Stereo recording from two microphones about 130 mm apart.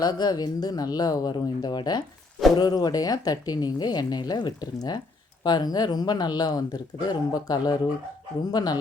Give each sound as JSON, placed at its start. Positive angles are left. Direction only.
{"t": 0.0, "sound": "speech", "side_deg": 30}